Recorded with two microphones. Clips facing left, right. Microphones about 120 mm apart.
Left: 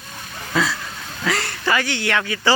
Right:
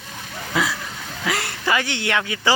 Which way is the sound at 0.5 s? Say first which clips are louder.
Left 2 dB; 15° right (ahead or behind).